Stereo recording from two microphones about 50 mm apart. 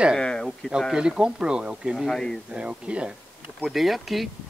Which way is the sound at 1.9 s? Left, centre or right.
Centre.